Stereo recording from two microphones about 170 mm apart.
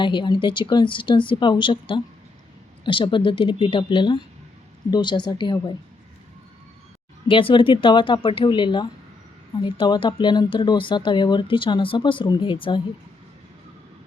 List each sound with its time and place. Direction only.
0.0 s speech: 30° left (ahead or behind)
7.3 s speech: 30° left (ahead or behind)